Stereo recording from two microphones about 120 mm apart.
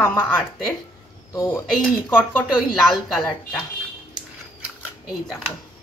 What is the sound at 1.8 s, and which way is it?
Speech, 5° right (ahead or behind).